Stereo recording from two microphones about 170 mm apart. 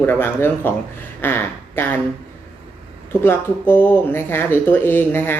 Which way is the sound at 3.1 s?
10° left (ahead or behind).